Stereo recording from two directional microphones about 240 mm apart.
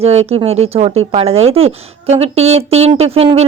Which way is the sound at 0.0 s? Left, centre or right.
Right.